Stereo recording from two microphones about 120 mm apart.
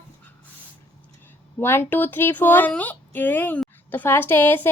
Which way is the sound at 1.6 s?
20° left (ahead or behind).